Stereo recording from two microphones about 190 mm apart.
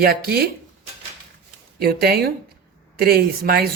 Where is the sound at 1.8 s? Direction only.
55° right (ahead or behind).